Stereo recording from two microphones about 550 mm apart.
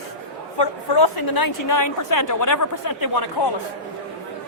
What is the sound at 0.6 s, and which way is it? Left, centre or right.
A woman's voice, left.